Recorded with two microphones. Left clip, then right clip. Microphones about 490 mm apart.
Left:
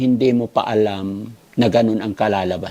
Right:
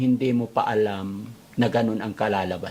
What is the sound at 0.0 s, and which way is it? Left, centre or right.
A man's voice, left.